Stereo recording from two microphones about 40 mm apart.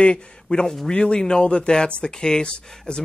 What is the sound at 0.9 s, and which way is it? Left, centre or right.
Speech, left.